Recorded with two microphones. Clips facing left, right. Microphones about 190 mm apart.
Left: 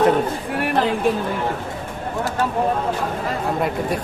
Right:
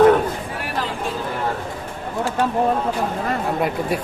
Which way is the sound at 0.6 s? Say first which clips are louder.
Left 9 dB; 60° left (ahead or behind).